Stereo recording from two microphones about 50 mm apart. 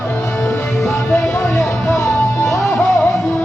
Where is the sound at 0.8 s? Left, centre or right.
Left.